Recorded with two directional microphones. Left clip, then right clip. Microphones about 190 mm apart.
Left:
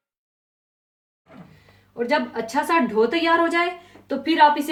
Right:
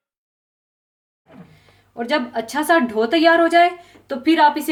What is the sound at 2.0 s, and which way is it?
A woman's voice, 45° right (ahead or behind).